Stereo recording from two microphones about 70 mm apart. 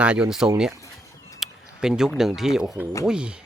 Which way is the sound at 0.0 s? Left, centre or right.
Centre.